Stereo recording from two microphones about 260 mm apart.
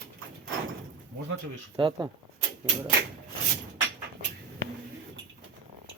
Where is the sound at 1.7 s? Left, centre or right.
Centre.